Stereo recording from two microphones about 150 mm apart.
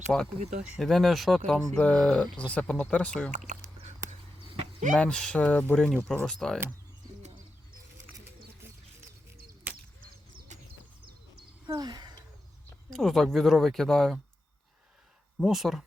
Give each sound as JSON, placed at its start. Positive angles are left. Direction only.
{"t": 0.1, "sound": "speech", "side_deg": 5}
{"t": 3.3, "sound": "a sound", "side_deg": -55}
{"t": 4.9, "sound": "speech", "side_deg": 5}
{"t": 10.5, "sound": "bird", "side_deg": -55}
{"t": 11.6, "sound": "a sound", "side_deg": -25}
{"t": 12.9, "sound": "speech", "side_deg": 0}
{"t": 15.4, "sound": "speech", "side_deg": 0}